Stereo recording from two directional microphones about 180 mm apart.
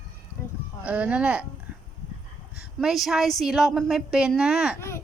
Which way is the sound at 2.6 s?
5° right (ahead or behind).